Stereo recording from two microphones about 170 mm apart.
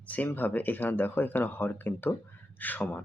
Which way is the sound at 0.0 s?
10° left (ahead or behind).